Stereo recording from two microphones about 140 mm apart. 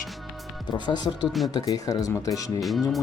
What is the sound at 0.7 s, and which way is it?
Speech, 30° left (ahead or behind).